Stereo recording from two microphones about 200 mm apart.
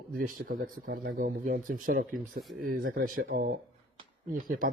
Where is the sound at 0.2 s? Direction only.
50° right (ahead or behind).